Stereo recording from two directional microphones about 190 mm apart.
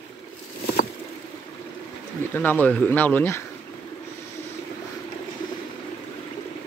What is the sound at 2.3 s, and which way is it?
Speech, 10° left (ahead or behind).